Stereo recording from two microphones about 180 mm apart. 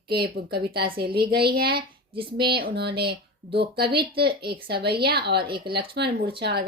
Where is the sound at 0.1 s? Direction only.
60° right (ahead or behind).